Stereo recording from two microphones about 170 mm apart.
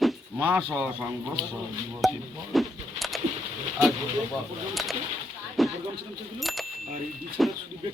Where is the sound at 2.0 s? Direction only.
Centre (ahead or behind).